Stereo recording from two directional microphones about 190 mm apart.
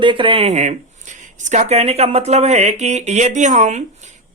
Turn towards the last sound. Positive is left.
turn(degrees=-40)  # may be behind; listen again after turning